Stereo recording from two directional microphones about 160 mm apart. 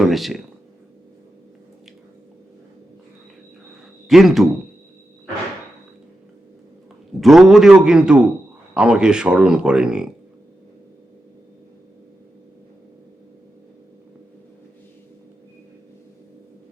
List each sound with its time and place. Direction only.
0.0 s speech: centre (ahead or behind)
4.1 s speech: centre (ahead or behind)
7.2 s speech: centre (ahead or behind)